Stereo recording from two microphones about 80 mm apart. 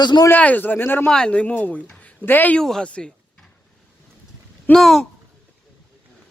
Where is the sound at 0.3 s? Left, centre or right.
Left.